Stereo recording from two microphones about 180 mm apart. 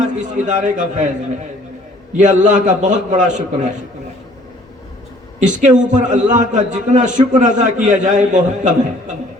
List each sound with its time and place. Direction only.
0.0 s a man's voice: 45° right (ahead or behind)
2.1 s a man's voice: 45° right (ahead or behind)
5.4 s a man's voice: 45° right (ahead or behind)